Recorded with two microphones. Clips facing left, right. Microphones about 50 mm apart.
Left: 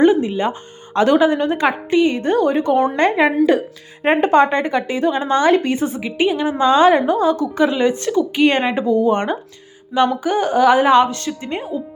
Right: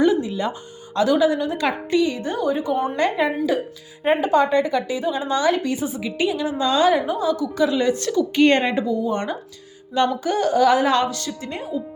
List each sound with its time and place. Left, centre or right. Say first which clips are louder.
0.0 s a sound: left 5 dB; left
0.9 s a woman's voice: left 4 dB; left
3.0 s a woman's voice: left 6 dB; left
6.0 s a woman's voice: left 4 dB; left
7.2 s a woman's voice: left 5 dB; left
7.4 s speech: left 3 dB; left
8.4 s speech: even; centre
8.9 s a woman's voice: left 7 dB; left
10.2 s a woman's voice: left 2 dB; left